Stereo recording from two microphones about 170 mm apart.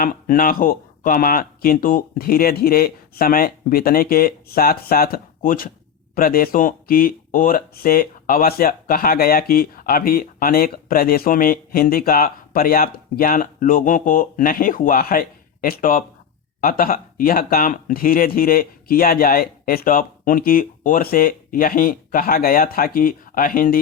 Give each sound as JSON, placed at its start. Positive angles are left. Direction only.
{"t": 0.0, "sound": "speech", "side_deg": 55}